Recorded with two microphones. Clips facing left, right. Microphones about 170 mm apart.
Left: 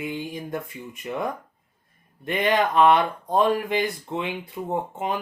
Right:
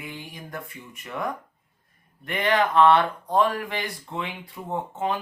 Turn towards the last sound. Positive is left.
turn(degrees=15)  # may be behind; listen again after turning